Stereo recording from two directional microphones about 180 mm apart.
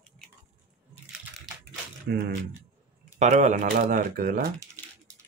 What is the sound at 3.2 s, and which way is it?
Speech, 40° right (ahead or behind).